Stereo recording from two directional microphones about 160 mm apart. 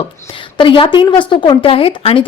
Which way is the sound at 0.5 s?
30° left (ahead or behind).